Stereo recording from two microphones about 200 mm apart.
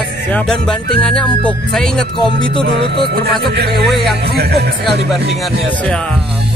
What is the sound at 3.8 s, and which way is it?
Speech, centre (ahead or behind).